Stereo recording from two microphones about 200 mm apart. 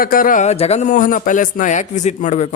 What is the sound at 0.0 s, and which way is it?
A man's voice, 45° left (ahead or behind).